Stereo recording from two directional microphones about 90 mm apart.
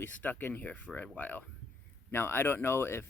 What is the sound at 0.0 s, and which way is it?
Speech, 20° left (ahead or behind).